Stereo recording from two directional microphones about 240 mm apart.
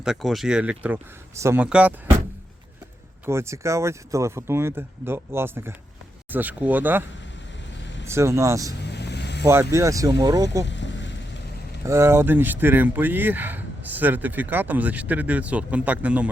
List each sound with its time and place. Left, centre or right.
0.0 s speech: centre
3.2 s speech: centre
8.0 s speech: centre
8.8 s vehicle: left
9.4 s speech: centre
10.7 s a sound: left
11.9 s speech: centre